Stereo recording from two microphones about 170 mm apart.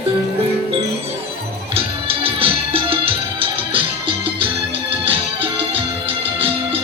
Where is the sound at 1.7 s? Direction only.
35° right (ahead or behind).